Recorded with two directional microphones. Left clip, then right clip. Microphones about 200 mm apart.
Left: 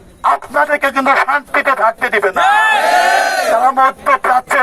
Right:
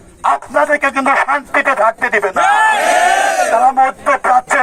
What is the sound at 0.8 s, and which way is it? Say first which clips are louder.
Speech: left 1 dB; centre (ahead or behind).